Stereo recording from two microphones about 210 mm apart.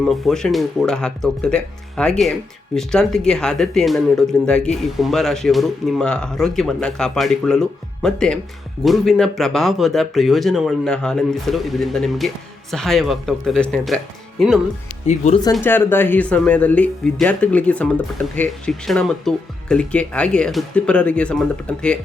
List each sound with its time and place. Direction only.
0.0 s speech: centre (ahead or behind)
15.0 s speech: 35° left (ahead or behind)
15.6 s speech: 10° left (ahead or behind)